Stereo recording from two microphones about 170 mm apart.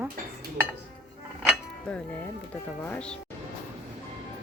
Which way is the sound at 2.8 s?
5° left (ahead or behind).